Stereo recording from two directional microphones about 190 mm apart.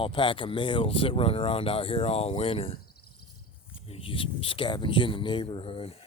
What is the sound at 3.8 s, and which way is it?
Speech, 30° left (ahead or behind).